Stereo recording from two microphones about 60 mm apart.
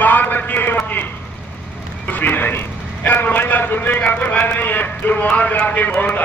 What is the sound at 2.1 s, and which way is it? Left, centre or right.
A man's voice, left.